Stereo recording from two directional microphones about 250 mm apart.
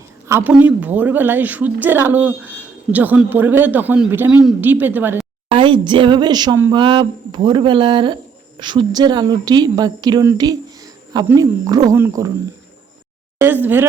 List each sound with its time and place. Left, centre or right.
0.3 s speech: centre
5.5 s speech: centre
13.4 s speech: centre